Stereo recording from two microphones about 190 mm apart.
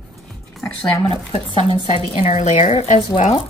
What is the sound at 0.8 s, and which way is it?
Speech, 20° left (ahead or behind).